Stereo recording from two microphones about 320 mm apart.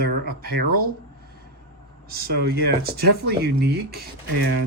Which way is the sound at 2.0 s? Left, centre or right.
Right.